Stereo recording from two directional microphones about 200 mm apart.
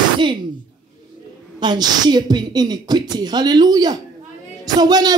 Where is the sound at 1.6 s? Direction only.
20° right (ahead or behind).